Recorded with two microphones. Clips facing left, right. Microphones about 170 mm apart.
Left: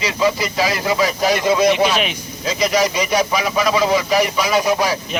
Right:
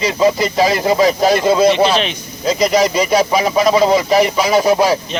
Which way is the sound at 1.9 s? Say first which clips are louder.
Right 3 dB; 10° left (ahead or behind).